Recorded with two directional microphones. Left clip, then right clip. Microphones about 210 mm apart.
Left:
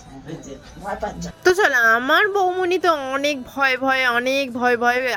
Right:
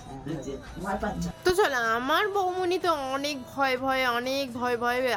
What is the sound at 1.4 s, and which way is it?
Speech, 25° left (ahead or behind).